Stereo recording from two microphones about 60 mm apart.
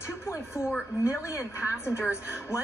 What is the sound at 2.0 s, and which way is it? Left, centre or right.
Speech, left.